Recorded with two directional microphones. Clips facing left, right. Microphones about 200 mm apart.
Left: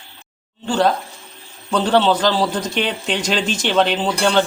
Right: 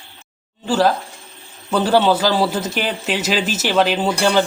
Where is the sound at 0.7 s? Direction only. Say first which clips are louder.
Right 1 dB; 5° right (ahead or behind).